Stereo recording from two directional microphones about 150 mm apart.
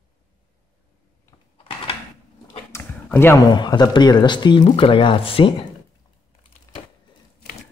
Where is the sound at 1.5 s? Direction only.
35° left (ahead or behind).